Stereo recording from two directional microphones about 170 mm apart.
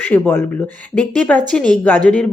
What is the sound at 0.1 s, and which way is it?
Speech, 10° left (ahead or behind).